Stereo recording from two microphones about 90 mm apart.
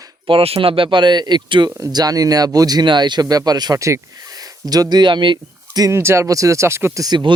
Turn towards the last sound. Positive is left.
turn(degrees=-50)  # may be behind; listen again after turning